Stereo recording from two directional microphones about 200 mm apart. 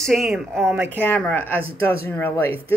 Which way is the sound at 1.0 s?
10° left (ahead or behind).